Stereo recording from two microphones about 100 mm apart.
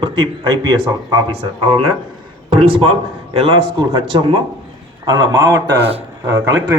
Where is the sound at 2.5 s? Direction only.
65° right (ahead or behind).